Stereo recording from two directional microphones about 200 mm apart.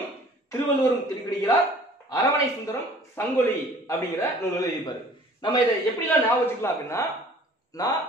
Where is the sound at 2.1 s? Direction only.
15° left (ahead or behind).